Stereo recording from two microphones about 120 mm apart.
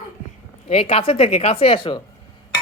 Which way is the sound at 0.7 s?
55° left (ahead or behind).